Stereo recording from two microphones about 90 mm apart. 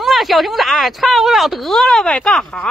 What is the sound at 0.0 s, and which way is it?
Speech, centre (ahead or behind).